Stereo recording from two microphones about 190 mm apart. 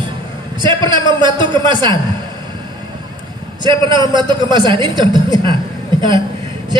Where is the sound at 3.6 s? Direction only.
25° right (ahead or behind).